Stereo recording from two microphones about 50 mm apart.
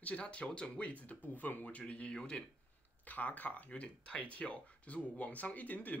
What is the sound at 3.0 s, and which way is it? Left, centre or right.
Speech, left.